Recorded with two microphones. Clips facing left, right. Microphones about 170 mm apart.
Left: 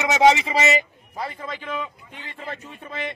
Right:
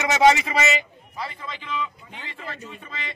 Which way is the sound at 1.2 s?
45° left (ahead or behind).